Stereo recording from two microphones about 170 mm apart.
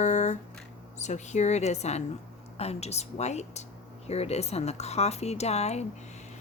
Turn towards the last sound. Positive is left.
turn(degrees=40)  # may be behind; listen again after turning